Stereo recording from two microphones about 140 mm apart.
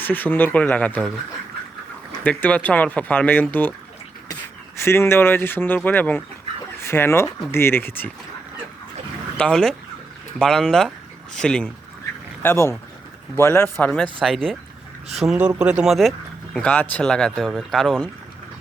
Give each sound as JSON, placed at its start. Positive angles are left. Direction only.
{"t": 0.0, "sound": "speech", "side_deg": 15}
{"t": 2.2, "sound": "speech", "side_deg": 10}
{"t": 4.8, "sound": "speech", "side_deg": 15}
{"t": 9.4, "sound": "speech", "side_deg": 5}
{"t": 12.4, "sound": "speech", "side_deg": 15}
{"t": 16.6, "sound": "speech", "side_deg": 10}